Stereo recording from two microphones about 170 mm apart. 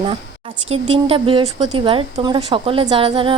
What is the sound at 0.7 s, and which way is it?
A woman's voice, 35° right (ahead or behind).